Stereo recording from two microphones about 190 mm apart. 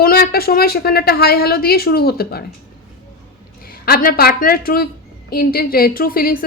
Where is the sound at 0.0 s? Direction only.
55° left (ahead or behind).